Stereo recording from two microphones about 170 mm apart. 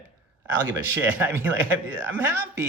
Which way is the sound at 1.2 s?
15° right (ahead or behind).